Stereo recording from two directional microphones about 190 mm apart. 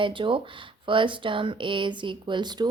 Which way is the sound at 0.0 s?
25° right (ahead or behind).